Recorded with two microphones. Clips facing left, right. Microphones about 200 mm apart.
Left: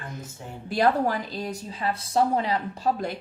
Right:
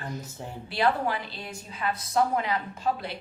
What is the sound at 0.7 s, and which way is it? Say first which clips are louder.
A woman's voice: left 4 dB; 45° left (ahead or behind).